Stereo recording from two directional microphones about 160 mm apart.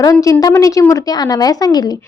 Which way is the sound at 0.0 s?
20° left (ahead or behind).